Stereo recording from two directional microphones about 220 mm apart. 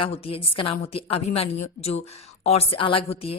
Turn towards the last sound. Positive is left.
turn(degrees=25)  # may be behind; listen again after turning